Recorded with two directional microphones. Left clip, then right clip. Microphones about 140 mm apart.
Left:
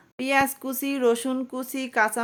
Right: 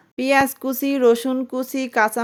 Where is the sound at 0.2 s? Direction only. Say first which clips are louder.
Right 5 dB; 35° right (ahead or behind).